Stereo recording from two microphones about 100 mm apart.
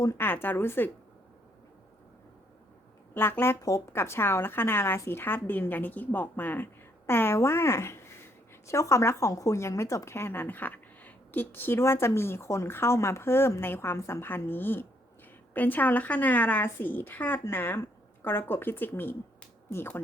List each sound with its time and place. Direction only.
0.0 s speech: 30° left (ahead or behind)
0.3 s a woman's voice: 20° left (ahead or behind)
3.2 s a woman's voice: 20° left (ahead or behind)